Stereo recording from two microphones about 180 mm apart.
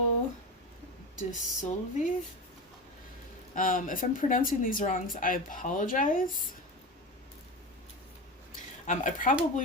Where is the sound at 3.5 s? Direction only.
50° left (ahead or behind).